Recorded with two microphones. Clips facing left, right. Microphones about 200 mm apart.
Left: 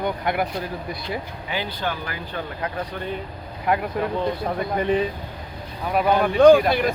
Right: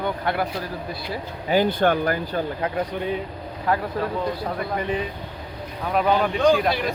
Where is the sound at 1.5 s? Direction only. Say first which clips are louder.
Right 9 dB; 45° right (ahead or behind).